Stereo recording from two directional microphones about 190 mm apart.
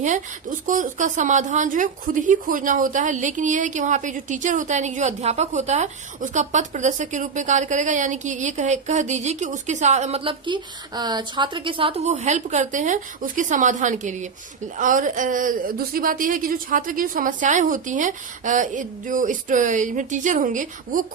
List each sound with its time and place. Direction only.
0.6 s a woman's voice: 40° right (ahead or behind)